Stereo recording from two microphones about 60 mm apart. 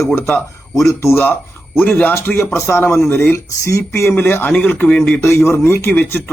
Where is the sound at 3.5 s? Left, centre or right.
Left.